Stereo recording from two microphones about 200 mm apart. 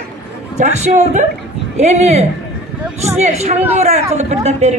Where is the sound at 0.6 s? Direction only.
35° right (ahead or behind).